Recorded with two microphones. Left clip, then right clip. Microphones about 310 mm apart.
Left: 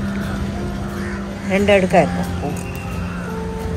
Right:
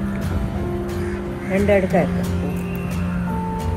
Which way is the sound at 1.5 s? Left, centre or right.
Left.